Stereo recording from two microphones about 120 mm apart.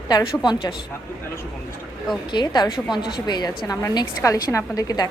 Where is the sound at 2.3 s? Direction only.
40° left (ahead or behind).